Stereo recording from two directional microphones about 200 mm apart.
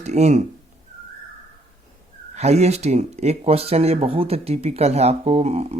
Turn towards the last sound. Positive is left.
turn(degrees=-30)  # may be behind; listen again after turning